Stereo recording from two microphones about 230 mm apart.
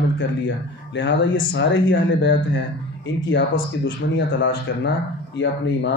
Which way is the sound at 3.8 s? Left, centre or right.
Left.